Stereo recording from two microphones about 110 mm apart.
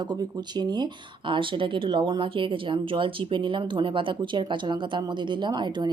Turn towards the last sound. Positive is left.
turn(degrees=-40)  # may be behind; listen again after turning